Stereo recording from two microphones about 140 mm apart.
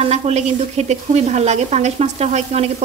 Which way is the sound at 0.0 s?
50° right (ahead or behind).